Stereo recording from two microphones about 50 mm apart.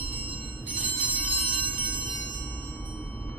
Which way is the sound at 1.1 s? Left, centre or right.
Left.